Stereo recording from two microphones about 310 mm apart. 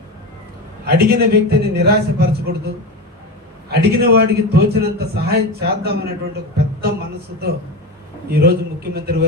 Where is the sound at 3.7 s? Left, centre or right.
Right.